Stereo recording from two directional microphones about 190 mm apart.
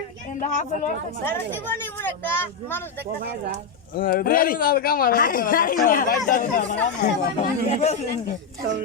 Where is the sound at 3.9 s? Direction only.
50° left (ahead or behind).